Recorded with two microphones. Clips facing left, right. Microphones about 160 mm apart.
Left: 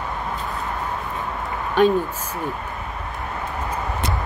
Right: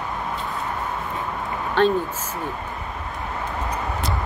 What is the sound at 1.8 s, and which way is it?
Speech, 10° left (ahead or behind).